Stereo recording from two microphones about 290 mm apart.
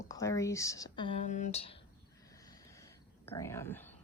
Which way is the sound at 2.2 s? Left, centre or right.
Centre.